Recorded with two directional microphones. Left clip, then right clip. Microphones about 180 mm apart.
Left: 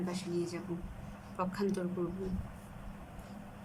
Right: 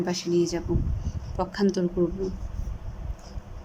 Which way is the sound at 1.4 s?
35° right (ahead or behind).